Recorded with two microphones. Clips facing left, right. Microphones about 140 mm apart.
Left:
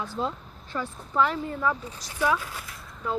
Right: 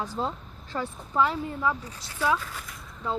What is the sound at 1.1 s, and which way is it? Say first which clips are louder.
Speech: even; 15° right (ahead or behind).